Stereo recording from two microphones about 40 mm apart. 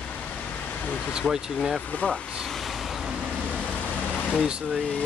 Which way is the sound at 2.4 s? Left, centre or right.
Centre.